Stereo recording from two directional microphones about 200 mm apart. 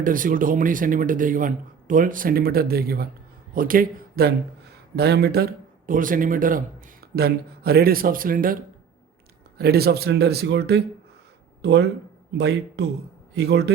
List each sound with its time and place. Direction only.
0.0 s speech: 45° right (ahead or behind)
9.6 s a man's voice: 50° right (ahead or behind)